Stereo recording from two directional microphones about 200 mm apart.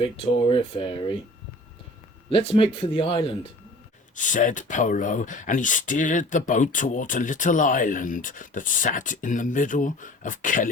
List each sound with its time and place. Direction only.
0.0 s speech: 25° left (ahead or behind)
2.5 s speech: 30° left (ahead or behind)
4.1 s speech: 40° left (ahead or behind)